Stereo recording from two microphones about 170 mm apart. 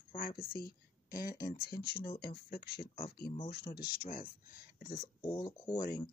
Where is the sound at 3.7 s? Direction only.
55° left (ahead or behind).